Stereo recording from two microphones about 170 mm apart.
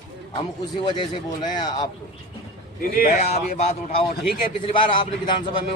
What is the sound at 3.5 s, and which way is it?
Speech, 60° left (ahead or behind).